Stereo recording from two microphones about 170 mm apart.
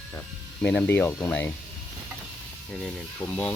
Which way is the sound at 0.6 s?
5° left (ahead or behind).